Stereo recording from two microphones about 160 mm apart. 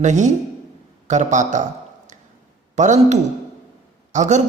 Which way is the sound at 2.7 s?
50° right (ahead or behind).